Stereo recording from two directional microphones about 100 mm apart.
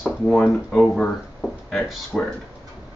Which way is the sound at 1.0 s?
5° left (ahead or behind).